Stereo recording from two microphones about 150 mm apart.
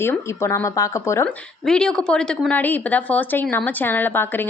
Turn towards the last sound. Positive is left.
turn(degrees=15)  # may be behind; listen again after turning